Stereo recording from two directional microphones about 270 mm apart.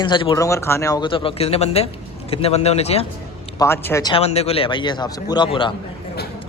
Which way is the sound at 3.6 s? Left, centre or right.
Centre.